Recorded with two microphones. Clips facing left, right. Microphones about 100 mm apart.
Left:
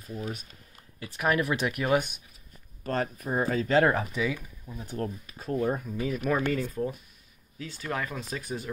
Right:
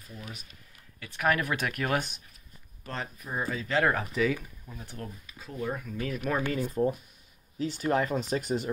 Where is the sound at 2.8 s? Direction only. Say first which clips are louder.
Left 8 dB; 45° left (ahead or behind).